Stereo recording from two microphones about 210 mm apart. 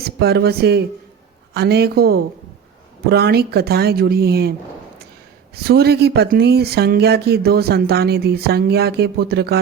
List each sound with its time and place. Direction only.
0.0 s speech: 50° right (ahead or behind)
5.5 s speech: 50° right (ahead or behind)